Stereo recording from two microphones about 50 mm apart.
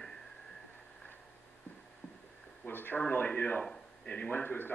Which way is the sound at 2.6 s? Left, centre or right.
Left.